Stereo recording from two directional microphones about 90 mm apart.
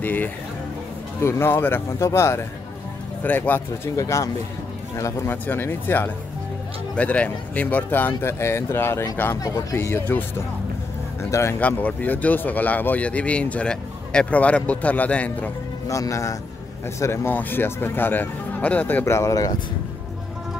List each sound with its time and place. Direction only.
0.0 s speech: 20° left (ahead or behind)
3.9 s a man's voice: 35° left (ahead or behind)
11.6 s a man's voice: 20° left (ahead or behind)
15.9 s speech: 35° left (ahead or behind); by 19.0 s 20° left (ahead or behind)
19.0 s speech: 35° left (ahead or behind)